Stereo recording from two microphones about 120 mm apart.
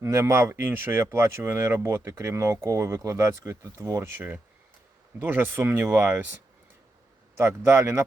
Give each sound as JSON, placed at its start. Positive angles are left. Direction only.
{"t": 0.0, "sound": "speech", "side_deg": -25}
{"t": 7.3, "sound": "speech", "side_deg": -20}